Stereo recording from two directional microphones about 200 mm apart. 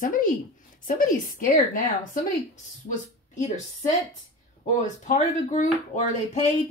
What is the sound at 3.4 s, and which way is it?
Speech, 35° left (ahead or behind).